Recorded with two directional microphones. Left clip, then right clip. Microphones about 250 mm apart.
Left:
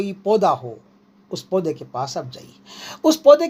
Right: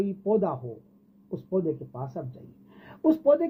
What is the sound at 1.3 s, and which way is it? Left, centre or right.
Speech, left.